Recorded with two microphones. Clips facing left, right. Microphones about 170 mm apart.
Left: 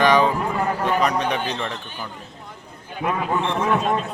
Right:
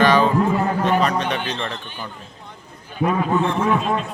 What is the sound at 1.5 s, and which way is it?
Speech, 5° left (ahead or behind).